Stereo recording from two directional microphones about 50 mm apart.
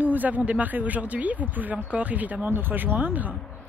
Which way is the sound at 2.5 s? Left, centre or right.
Right.